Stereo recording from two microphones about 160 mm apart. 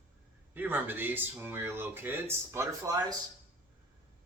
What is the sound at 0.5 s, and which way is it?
Speech, 10° right (ahead or behind).